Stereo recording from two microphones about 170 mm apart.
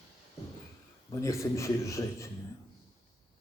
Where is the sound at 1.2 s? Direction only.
15° left (ahead or behind).